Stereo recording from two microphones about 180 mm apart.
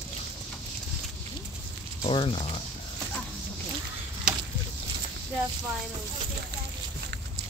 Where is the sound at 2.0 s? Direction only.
30° left (ahead or behind).